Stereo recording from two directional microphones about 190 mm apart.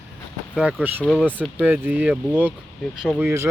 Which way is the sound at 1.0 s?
5° left (ahead or behind).